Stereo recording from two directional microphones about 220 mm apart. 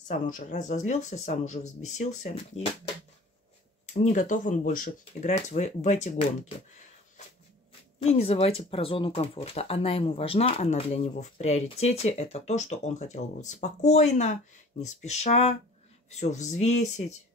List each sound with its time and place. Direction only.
0.1 s speech: 35° left (ahead or behind)
3.8 s speech: 35° left (ahead or behind)
8.0 s speech: 25° left (ahead or behind)